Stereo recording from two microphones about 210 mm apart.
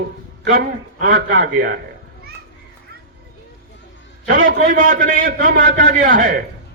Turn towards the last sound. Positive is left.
turn(degrees=-40)  # may be behind; listen again after turning